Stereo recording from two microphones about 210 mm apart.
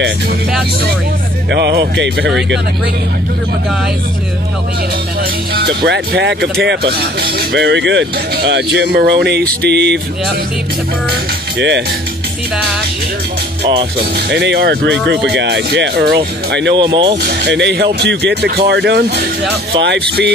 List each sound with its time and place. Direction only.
1.5 s speech: 55° right (ahead or behind)
5.5 s speech: 50° right (ahead or behind)
13.9 s speech: 50° right (ahead or behind)
16.7 s speech: 20° right (ahead or behind)
17.2 s speech: 50° right (ahead or behind)